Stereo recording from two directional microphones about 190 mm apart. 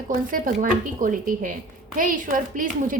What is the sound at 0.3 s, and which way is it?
A woman's voice, 45° right (ahead or behind).